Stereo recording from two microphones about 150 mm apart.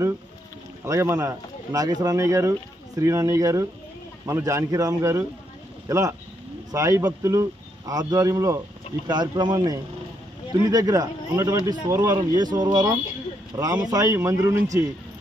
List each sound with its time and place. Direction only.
0.8 s speech: 20° right (ahead or behind)